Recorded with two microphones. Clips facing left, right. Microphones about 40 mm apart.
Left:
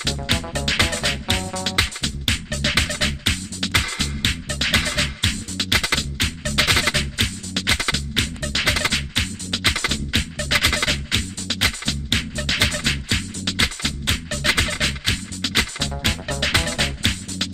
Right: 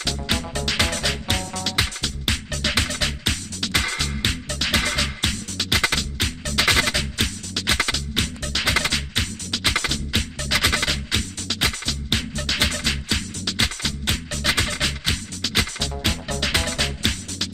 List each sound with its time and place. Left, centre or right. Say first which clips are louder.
0.0 s music: left 1 dB; left